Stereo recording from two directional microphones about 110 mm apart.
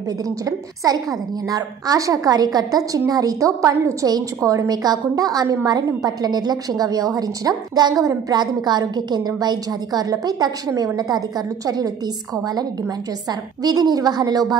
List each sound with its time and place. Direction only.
0.8 s a woman's voice: 35° right (ahead or behind)
13.3 s a woman's voice: 35° right (ahead or behind)